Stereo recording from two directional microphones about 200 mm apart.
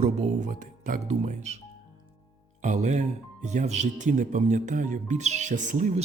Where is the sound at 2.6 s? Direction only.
35° right (ahead or behind).